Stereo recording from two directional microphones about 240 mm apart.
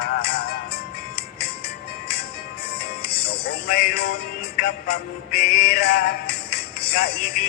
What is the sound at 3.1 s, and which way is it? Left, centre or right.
Music, left.